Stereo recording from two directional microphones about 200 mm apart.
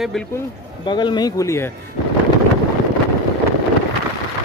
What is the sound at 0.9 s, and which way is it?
Speech, 20° left (ahead or behind).